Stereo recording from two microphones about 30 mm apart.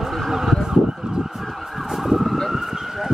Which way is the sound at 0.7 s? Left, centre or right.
Right.